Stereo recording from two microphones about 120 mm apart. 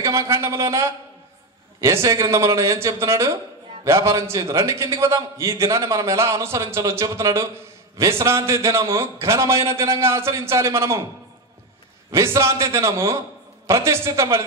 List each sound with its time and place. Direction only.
0.0 s a man's voice: 25° right (ahead or behind)
12.1 s a man's voice: 25° right (ahead or behind)